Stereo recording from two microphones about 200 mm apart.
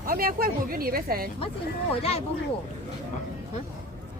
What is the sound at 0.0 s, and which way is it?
A woman's voice, 45° right (ahead or behind).